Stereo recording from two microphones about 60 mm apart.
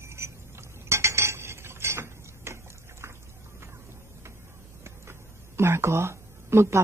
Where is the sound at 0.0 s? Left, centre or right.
Right.